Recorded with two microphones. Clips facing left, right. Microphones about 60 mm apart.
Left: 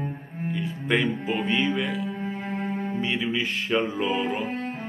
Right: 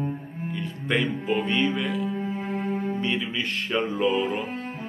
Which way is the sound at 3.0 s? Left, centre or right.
Centre.